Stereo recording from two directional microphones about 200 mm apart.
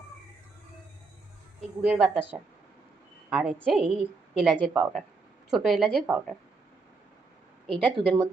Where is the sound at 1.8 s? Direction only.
5° right (ahead or behind).